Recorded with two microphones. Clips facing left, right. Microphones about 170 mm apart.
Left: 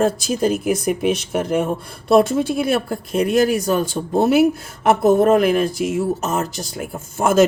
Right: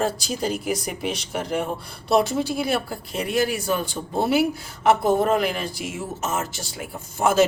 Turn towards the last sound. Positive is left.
turn(degrees=50)  # may be behind; listen again after turning